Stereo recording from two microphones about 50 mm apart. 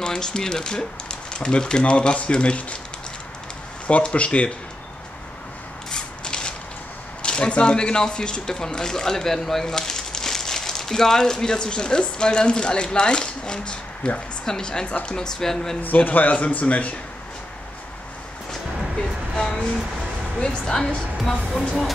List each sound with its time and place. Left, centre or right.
0.0 s speech: centre
3.8 s speech: left
5.9 s a sound: centre
7.2 s speech: centre
15.8 s speech: left
18.5 s music: centre
20.3 s speech: centre
21.2 s speech: centre